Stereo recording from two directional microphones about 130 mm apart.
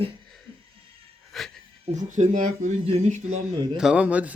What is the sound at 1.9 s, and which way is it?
Speech, 70° right (ahead or behind).